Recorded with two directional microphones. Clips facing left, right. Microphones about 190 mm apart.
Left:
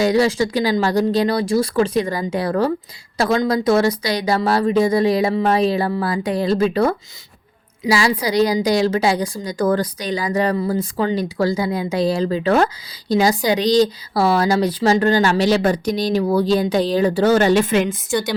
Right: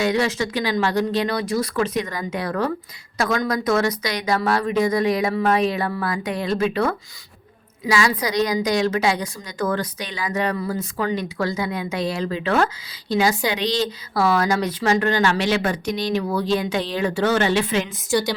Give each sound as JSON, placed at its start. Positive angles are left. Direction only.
{"t": 0.0, "sound": "a woman's voice", "side_deg": 35}
{"t": 18.1, "sound": "speech", "side_deg": 0}